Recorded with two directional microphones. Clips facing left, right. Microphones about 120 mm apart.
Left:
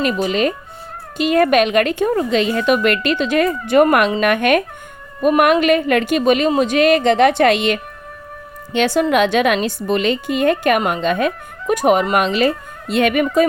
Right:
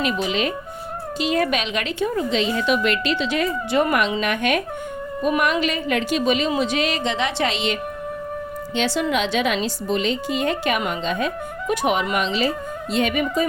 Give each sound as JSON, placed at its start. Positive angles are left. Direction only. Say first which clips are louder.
{"t": 0.0, "sound": "a woman's voice", "louder": "left 5 dB", "side_deg": 45}
{"t": 11.7, "sound": "a woman's voice", "louder": "left 7 dB", "side_deg": 45}